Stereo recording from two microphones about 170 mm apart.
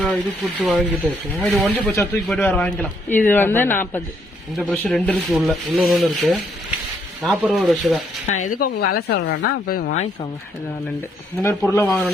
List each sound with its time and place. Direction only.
0.0 s rub: 5° left (ahead or behind)
2.2 s a man's voice: 5° left (ahead or behind)
4.7 s rub: 10° left (ahead or behind)
8.3 s speech: 50° left (ahead or behind)
11.7 s a man's voice: 15° left (ahead or behind)